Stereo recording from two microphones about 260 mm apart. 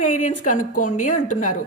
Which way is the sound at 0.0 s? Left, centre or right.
Left.